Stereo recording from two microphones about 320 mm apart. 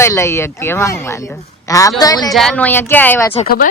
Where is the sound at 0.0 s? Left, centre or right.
Centre.